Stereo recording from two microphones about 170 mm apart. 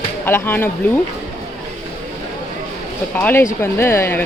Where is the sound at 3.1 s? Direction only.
15° left (ahead or behind).